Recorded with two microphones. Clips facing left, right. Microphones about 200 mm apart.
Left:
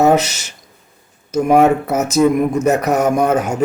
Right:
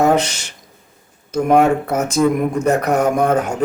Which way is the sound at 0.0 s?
5° left (ahead or behind).